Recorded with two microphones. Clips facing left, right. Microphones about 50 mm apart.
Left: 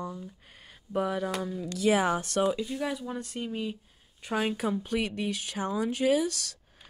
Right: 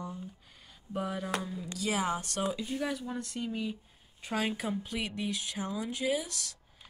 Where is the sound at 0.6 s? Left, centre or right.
Left.